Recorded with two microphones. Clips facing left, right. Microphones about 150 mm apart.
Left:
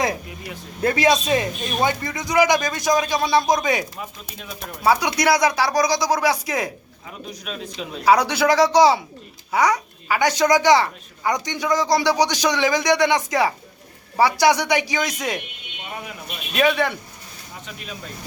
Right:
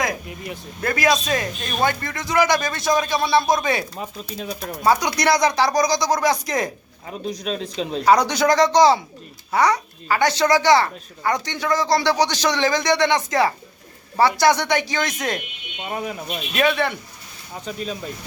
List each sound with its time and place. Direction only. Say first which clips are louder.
0.8 s speech: left 2 dB; 25° left (ahead or behind)
1.3 s a woman's voice: left 3 dB; 20° left (ahead or behind)
7.1 s a man's voice: right 7 dB; 35° right (ahead or behind)
8.0 s a woman's voice: even; 10° left (ahead or behind)
15.9 s speech: right 7 dB; 45° right (ahead or behind)
16.6 s a woman's voice: left 1 dB; 10° left (ahead or behind)
17.7 s a man's voice: right 10 dB; 35° right (ahead or behind)